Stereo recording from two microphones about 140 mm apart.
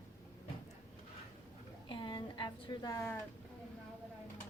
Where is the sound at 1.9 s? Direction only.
35° left (ahead or behind).